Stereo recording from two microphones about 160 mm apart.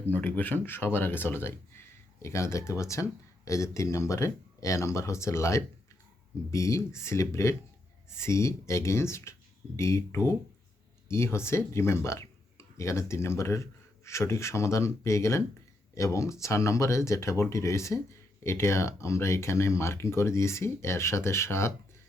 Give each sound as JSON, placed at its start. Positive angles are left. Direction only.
{"t": 0.1, "sound": "speech", "side_deg": 10}